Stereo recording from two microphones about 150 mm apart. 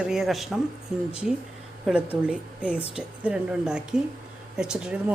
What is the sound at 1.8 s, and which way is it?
A woman's voice, 10° right (ahead or behind).